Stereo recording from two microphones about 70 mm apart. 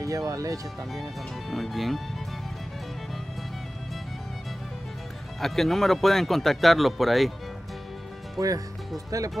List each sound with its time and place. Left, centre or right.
0.0 s speech: right
1.5 s speech: centre
5.4 s speech: centre
8.4 s speech: right